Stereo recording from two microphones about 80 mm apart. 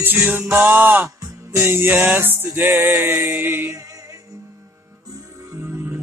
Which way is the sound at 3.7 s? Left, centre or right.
Right.